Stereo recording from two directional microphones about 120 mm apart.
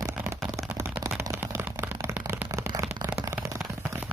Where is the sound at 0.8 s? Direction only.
20° right (ahead or behind).